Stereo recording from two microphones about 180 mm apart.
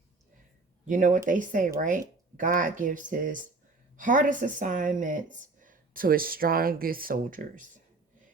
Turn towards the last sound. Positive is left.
turn(degrees=-50)  # may be behind; listen again after turning